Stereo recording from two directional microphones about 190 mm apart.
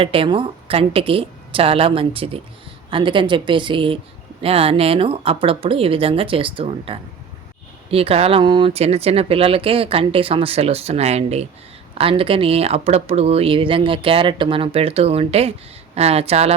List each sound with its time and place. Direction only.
0.0 s speech: 30° right (ahead or behind)